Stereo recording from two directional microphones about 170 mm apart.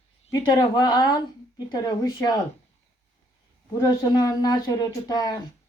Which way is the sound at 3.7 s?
25° left (ahead or behind).